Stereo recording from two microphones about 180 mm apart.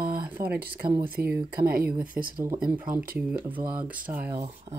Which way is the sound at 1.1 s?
60° right (ahead or behind).